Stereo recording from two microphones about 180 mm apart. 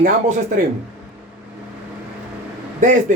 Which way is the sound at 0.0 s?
45° right (ahead or behind).